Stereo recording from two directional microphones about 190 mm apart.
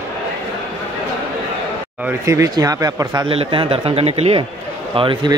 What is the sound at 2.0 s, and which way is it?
Speech, 15° right (ahead or behind).